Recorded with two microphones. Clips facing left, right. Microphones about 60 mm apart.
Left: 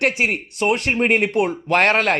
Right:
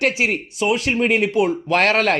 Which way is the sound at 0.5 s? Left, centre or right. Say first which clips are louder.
Even; left.